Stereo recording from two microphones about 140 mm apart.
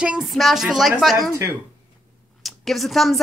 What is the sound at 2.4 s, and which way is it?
Speech, centre (ahead or behind).